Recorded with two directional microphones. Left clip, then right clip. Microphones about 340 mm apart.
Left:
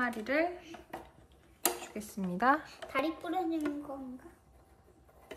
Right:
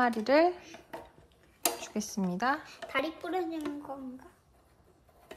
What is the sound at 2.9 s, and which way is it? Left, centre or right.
Speech, centre.